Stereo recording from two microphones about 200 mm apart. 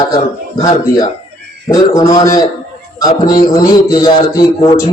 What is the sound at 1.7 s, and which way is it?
Speech, 15° left (ahead or behind).